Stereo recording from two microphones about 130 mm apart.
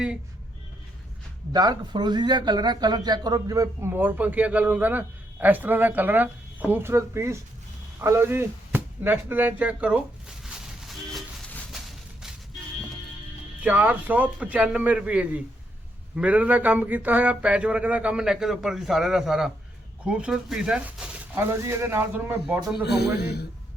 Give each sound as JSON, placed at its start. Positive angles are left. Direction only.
{"t": 1.5, "sound": "a man's voice", "side_deg": -35}
{"t": 8.0, "sound": "a sound", "side_deg": -20}
{"t": 13.6, "sound": "a man's voice", "side_deg": -10}
{"t": 21.5, "sound": "a man's voice", "side_deg": -20}